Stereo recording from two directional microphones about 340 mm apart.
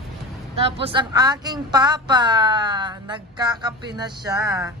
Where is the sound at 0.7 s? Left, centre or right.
Centre.